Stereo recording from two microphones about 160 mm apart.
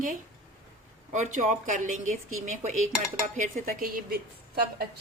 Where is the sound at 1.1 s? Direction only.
50° right (ahead or behind).